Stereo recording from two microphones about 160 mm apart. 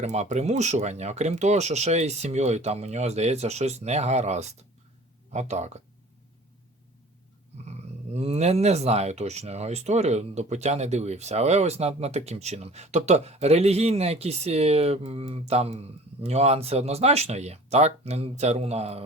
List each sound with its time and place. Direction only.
0.0 s speech: 45° right (ahead or behind)
7.6 s speech: 40° right (ahead or behind)